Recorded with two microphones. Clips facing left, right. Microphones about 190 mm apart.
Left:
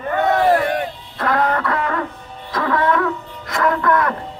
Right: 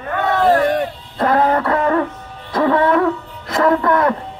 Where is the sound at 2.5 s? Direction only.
30° right (ahead or behind).